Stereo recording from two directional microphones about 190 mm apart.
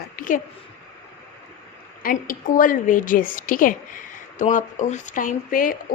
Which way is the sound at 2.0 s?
50° left (ahead or behind).